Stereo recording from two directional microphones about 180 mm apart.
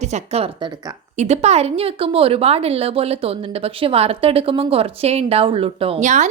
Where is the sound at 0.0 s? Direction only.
35° right (ahead or behind).